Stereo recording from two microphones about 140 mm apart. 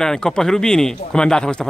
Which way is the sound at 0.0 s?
5° left (ahead or behind).